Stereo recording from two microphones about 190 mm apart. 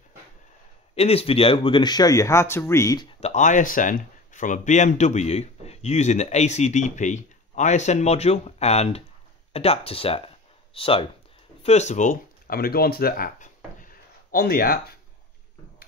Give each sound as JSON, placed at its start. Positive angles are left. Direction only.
{"t": 0.9, "sound": "speech", "side_deg": 30}
{"t": 3.2, "sound": "speech", "side_deg": 35}